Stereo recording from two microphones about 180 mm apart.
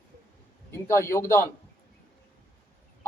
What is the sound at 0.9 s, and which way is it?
Speech, 15° left (ahead or behind).